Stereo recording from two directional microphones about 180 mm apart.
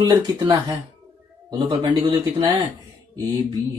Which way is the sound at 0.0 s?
20° right (ahead or behind).